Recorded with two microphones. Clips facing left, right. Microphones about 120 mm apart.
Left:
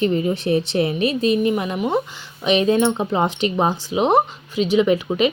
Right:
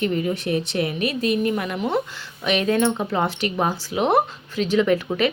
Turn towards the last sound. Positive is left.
turn(degrees=15)  # may be behind; listen again after turning